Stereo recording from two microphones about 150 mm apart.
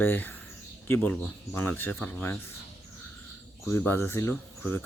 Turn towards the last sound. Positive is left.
turn(degrees=15)  # may be behind; listen again after turning